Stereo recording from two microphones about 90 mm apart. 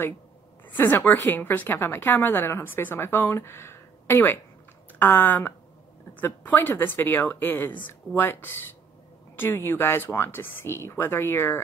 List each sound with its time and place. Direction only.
0.7 s a woman's voice: 20° left (ahead or behind)